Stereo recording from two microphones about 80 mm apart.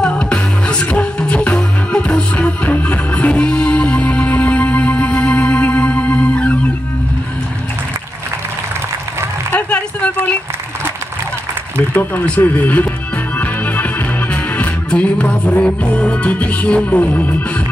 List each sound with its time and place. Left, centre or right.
0.0 s music: centre
9.5 s a sound: centre
11.9 s speech: left
13.4 s music: centre